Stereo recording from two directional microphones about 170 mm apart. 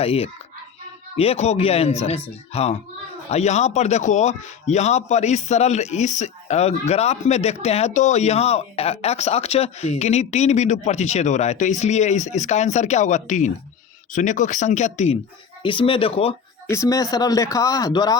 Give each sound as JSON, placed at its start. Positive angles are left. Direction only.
{"t": 0.0, "sound": "a man's voice", "side_deg": 35}
{"t": 15.6, "sound": "a man's voice", "side_deg": 30}
{"t": 16.6, "sound": "speech", "side_deg": 15}